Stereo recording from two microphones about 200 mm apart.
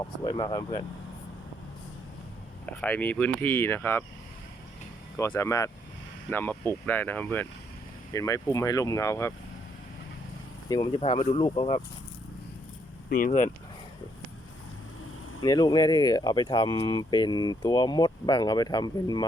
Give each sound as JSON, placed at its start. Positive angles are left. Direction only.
{"t": 0.0, "sound": "speech", "side_deg": 20}
{"t": 2.6, "sound": "speech", "side_deg": 10}
{"t": 5.1, "sound": "speech", "side_deg": 15}
{"t": 10.7, "sound": "speech", "side_deg": 25}
{"t": 13.1, "sound": "speech", "side_deg": 45}
{"t": 15.4, "sound": "speech", "side_deg": 20}